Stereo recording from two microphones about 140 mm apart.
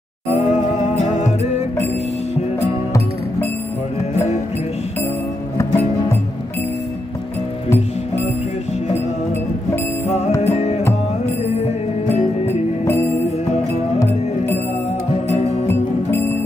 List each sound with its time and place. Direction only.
0.5 s music: 55° left (ahead or behind)
10.4 s music: 55° left (ahead or behind)
12.8 s music: 20° left (ahead or behind)
15.3 s music: 50° left (ahead or behind)
15.7 s music: 15° left (ahead or behind)